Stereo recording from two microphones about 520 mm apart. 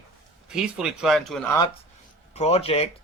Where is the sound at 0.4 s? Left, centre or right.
Centre.